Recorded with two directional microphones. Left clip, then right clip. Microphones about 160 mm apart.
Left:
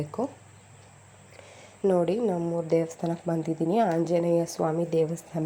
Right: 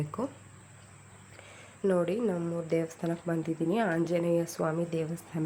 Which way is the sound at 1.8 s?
10° left (ahead or behind).